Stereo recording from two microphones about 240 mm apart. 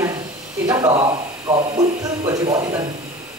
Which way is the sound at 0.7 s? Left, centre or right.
Centre.